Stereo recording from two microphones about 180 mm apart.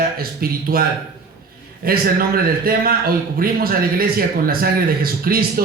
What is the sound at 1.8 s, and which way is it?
A man's voice, 55° right (ahead or behind).